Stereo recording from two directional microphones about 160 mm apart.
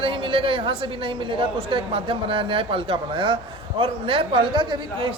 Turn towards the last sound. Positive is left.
turn(degrees=-30)  # may be behind; listen again after turning